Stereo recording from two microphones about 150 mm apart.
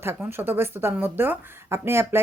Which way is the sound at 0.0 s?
15° right (ahead or behind).